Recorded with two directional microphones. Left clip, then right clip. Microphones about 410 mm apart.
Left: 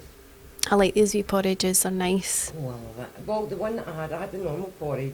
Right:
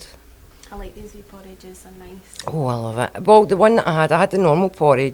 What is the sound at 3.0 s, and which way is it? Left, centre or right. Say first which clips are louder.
Speech: right 17 dB; right.